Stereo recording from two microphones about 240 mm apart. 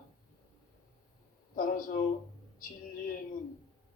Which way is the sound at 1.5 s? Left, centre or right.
Left.